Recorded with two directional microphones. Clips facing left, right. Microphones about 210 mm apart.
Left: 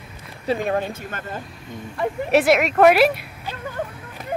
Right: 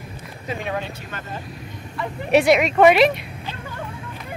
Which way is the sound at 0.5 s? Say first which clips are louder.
Left 6 dB; 45° left (ahead or behind).